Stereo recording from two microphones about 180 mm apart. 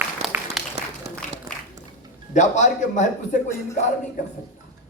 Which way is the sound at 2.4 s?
45° left (ahead or behind).